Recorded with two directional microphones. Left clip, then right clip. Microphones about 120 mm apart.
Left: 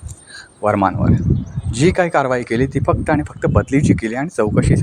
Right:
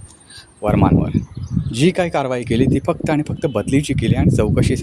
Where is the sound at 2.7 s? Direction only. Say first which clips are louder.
Left 1 dB; 10° right (ahead or behind).